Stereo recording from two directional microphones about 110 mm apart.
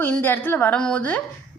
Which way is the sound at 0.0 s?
15° left (ahead or behind).